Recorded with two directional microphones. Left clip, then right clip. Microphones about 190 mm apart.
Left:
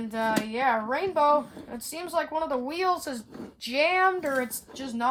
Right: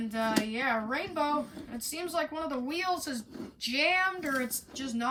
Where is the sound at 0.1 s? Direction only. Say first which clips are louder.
Left 4 dB; 40° left (ahead or behind).